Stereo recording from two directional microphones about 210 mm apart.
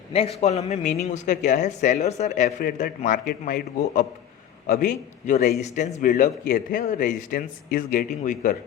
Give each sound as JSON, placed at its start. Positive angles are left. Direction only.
{"t": 0.1, "sound": "a man's voice", "side_deg": 30}